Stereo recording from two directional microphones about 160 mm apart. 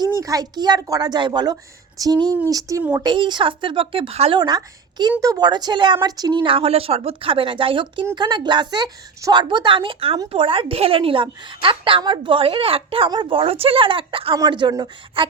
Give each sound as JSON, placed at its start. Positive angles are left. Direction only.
{"t": 0.2, "sound": "a woman's voice", "side_deg": -25}
{"t": 4.4, "sound": "a woman's voice", "side_deg": -25}